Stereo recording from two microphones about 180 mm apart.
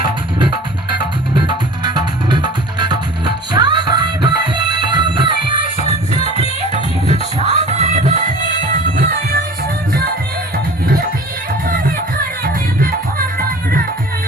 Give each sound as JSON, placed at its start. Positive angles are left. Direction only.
{"t": 0.3, "sound": "music", "side_deg": -25}
{"t": 9.0, "sound": "music", "side_deg": -55}